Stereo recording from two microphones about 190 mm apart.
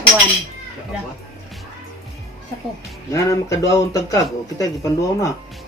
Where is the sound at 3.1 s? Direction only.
15° left (ahead or behind).